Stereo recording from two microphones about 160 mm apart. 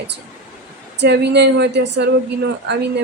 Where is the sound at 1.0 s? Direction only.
90° right.